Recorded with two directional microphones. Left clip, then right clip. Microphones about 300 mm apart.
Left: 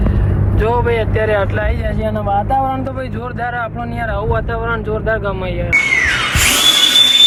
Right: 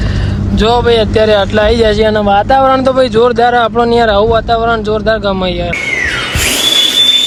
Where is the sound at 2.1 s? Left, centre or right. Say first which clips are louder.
Right 8 dB; right.